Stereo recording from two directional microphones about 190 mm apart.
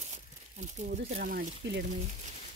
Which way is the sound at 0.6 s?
45° right (ahead or behind).